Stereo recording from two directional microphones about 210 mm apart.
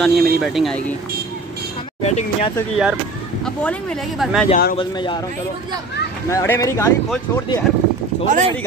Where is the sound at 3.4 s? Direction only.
5° left (ahead or behind).